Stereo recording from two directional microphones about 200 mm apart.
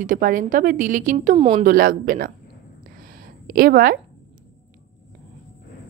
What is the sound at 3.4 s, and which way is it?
Speech, 45° right (ahead or behind).